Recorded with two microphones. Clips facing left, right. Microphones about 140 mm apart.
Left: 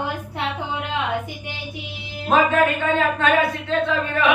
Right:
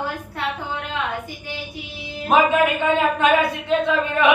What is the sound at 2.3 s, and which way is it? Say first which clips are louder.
A man's voice: right 1 dB; 15° right (ahead or behind).